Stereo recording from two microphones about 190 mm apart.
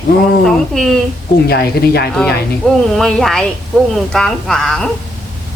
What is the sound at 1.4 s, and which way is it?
Speech, 55° left (ahead or behind).